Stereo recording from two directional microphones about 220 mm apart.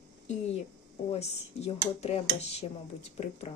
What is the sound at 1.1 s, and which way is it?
Speech, 25° left (ahead or behind).